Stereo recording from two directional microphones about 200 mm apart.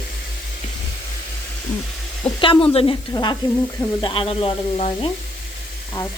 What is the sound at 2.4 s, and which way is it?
Speech, 25° left (ahead or behind).